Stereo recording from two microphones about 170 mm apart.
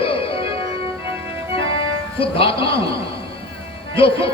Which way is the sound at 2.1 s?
30° left (ahead or behind).